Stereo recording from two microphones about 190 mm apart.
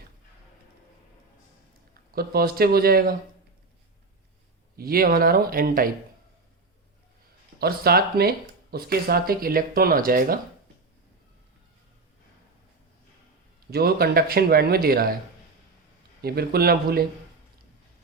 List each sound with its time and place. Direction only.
2.1 s speech: 50° right (ahead or behind)
4.8 s speech: 50° right (ahead or behind)
7.6 s speech: 55° right (ahead or behind)
13.7 s speech: 55° right (ahead or behind)
16.2 s speech: 55° right (ahead or behind)